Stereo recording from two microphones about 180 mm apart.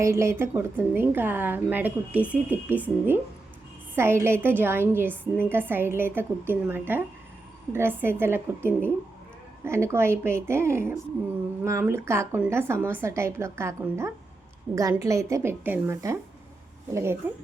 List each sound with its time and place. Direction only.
0.0 s a woman's voice: 15° right (ahead or behind)